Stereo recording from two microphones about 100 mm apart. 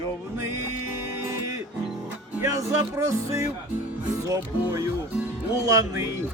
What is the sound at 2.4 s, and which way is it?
Music, 30° right (ahead or behind).